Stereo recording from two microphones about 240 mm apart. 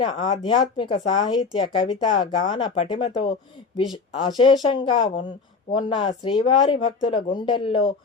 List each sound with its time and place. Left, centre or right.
0.0 s speech: centre